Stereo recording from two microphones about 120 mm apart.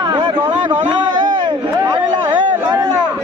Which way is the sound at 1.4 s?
40° right (ahead or behind).